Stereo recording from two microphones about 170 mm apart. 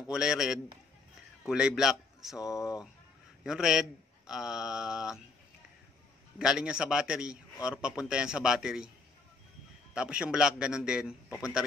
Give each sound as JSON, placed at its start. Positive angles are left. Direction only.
{"t": 0.1, "sound": "a man's voice", "side_deg": -5}
{"t": 2.5, "sound": "speech", "side_deg": 20}
{"t": 3.4, "sound": "a man's voice", "side_deg": -5}
{"t": 6.3, "sound": "a man's voice", "side_deg": -5}
{"t": 9.9, "sound": "a man's voice", "side_deg": -5}